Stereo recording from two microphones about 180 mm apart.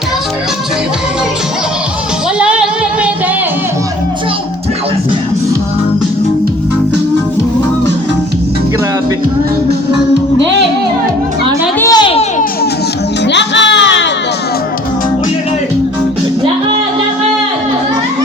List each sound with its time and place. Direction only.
2.4 s music: 5° right (ahead or behind)
11.8 s a sound: 20° left (ahead or behind)
13.2 s music: 75° left (ahead or behind)